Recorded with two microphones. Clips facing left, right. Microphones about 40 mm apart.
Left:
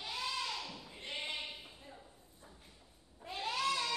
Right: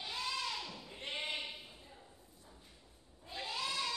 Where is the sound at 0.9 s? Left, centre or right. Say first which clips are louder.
Right 1 dB; right.